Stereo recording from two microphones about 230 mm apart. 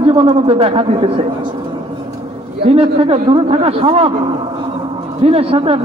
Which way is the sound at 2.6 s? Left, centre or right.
Right.